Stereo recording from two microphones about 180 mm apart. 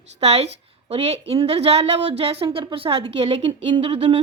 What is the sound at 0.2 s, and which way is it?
A woman's voice, 35° right (ahead or behind).